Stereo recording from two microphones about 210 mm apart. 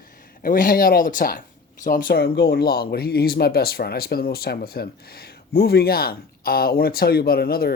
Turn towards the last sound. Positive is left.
turn(degrees=45)  # may be behind; listen again after turning